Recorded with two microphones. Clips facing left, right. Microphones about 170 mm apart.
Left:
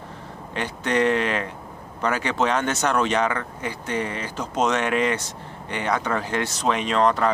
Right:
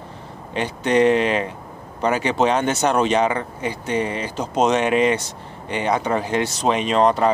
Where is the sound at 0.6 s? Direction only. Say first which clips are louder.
Right 5 dB; 20° right (ahead or behind).